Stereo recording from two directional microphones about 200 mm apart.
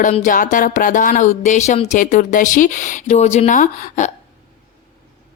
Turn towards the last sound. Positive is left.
turn(degrees=40)  # may be behind; listen again after turning